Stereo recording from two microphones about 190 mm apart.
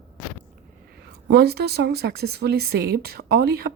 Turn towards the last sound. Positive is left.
turn(degrees=-55)  # may be behind; listen again after turning